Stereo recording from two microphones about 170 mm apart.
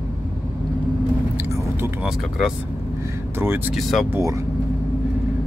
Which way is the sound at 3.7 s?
Centre (ahead or behind).